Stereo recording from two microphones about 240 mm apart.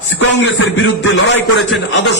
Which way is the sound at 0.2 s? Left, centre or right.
Left.